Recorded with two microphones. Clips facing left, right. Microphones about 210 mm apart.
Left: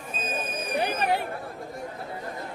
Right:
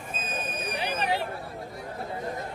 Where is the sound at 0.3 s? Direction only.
50° left (ahead or behind).